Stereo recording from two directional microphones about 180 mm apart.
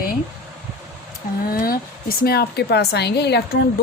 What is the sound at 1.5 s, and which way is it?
Speech, 55° left (ahead or behind).